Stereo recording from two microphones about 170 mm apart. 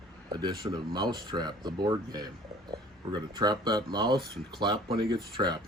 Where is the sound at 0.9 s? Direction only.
25° right (ahead or behind).